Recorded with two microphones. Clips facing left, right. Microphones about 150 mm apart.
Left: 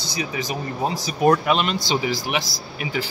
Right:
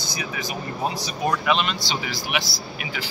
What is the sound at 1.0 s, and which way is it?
A man's voice, 50° left (ahead or behind).